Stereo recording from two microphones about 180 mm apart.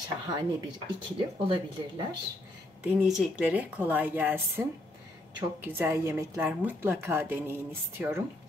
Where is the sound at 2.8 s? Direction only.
5° right (ahead or behind).